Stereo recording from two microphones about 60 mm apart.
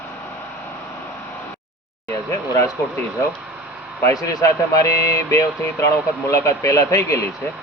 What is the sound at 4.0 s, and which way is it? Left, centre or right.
Speech, left.